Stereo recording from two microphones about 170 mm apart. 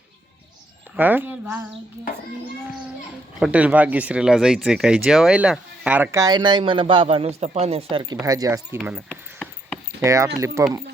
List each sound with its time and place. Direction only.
0.9 s speech: 10° right (ahead or behind)
3.4 s speech: 10° right (ahead or behind); by 8.0 s 35° right (ahead or behind)
8.1 s speech: 20° right (ahead or behind)
8.8 s speech: 5° right (ahead or behind)
9.0 s a sound: 5° left (ahead or behind)
10.0 s speech: 20° right (ahead or behind)